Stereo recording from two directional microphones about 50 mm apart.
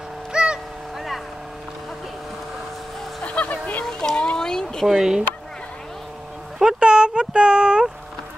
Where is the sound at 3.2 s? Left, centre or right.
Left.